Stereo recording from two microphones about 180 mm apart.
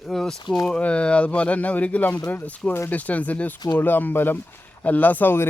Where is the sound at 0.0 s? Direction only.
Centre (ahead or behind).